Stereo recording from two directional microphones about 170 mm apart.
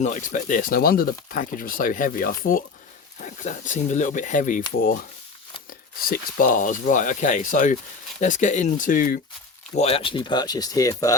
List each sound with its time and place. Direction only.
0.0 s speech: 50° left (ahead or behind)
6.1 s speech: 60° left (ahead or behind)
9.7 s speech: 35° left (ahead or behind); by 11.2 s 20° left (ahead or behind)